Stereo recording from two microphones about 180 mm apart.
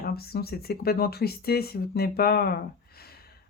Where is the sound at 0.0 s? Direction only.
60° left (ahead or behind).